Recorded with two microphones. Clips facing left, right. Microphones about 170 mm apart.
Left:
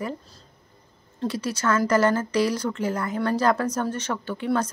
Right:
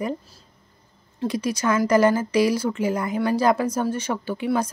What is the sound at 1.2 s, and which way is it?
Speech, 15° right (ahead or behind).